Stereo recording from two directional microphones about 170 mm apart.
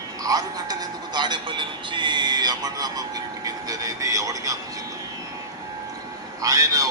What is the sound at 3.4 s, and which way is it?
Speech, 20° right (ahead or behind).